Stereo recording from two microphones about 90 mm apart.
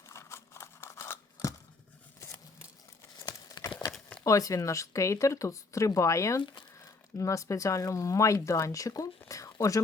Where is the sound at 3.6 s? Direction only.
60° left (ahead or behind).